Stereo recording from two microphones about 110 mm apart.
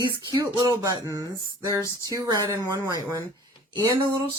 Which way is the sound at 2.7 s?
40° right (ahead or behind).